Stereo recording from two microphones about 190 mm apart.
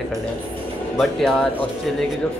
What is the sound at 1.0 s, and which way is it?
Speech, 5° left (ahead or behind).